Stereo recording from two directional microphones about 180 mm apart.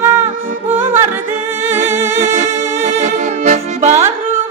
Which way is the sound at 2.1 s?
40° right (ahead or behind).